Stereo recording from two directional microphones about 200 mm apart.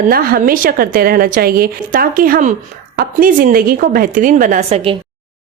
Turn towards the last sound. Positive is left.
turn(degrees=-30)  # may be behind; listen again after turning